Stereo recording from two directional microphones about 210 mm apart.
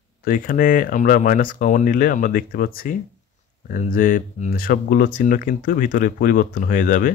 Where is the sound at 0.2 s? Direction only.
40° left (ahead or behind).